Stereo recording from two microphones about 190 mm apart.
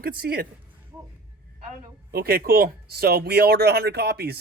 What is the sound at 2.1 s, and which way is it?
Speech, 55° right (ahead or behind).